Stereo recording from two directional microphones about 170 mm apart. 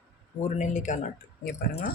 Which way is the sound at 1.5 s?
70° left (ahead or behind).